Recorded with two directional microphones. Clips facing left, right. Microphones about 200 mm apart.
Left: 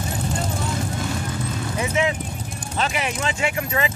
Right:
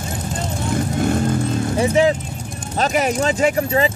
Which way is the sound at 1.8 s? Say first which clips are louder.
Right 7 dB; 35° right (ahead or behind).